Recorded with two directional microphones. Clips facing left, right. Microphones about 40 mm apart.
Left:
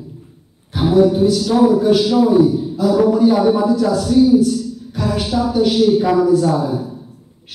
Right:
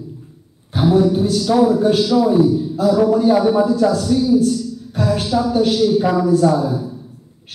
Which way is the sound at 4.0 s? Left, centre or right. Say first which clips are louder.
Left 3 dB; centre.